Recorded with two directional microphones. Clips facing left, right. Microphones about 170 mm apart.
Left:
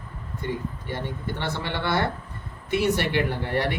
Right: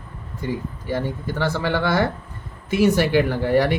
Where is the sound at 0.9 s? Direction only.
90° right.